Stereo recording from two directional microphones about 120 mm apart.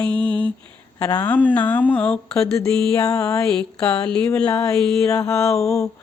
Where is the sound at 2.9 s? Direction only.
30° left (ahead or behind).